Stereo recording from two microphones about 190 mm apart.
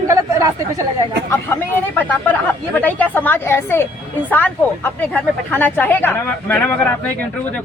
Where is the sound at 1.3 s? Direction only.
10° left (ahead or behind).